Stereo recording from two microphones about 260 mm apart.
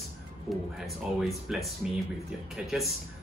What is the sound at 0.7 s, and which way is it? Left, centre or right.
A man's voice, centre.